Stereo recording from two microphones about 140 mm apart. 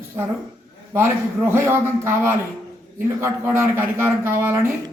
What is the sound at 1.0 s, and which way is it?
A man's voice, 15° right (ahead or behind).